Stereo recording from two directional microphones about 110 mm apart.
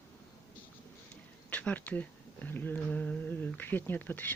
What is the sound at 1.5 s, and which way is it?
Speech, 15° left (ahead or behind).